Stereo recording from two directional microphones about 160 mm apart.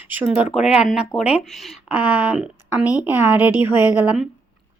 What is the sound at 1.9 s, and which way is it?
A woman's voice, 10° right (ahead or behind).